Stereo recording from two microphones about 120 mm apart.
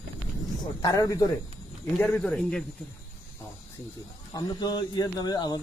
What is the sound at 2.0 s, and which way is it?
Speech, 15° left (ahead or behind).